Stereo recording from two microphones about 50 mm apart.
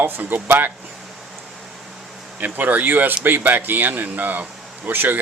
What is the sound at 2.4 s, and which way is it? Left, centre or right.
Speech, right.